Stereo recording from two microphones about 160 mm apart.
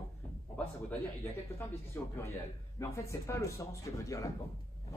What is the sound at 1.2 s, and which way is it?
Speech, 15° left (ahead or behind).